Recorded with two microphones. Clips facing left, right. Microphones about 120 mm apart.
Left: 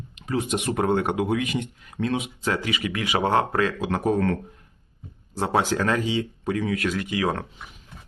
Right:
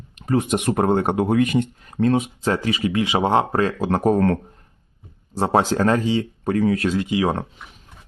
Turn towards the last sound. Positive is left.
turn(degrees=-25)  # may be behind; listen again after turning